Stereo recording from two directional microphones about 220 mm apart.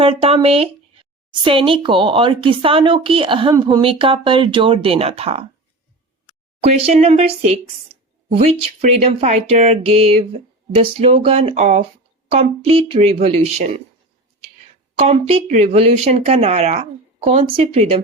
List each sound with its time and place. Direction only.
0.0 s speech: 25° right (ahead or behind)
6.6 s speech: 30° right (ahead or behind)
8.3 s speech: 30° right (ahead or behind)
14.9 s speech: 30° right (ahead or behind)